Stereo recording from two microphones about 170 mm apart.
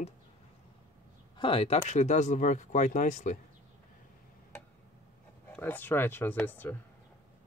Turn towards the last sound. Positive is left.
turn(degrees=10)  # may be behind; listen again after turning